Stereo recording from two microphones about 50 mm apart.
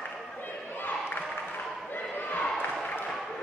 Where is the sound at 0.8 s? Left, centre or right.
Left.